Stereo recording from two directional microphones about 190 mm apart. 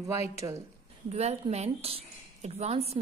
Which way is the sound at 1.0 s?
35° right (ahead or behind).